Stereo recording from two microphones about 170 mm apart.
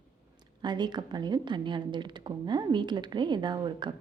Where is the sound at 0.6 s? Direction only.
25° right (ahead or behind).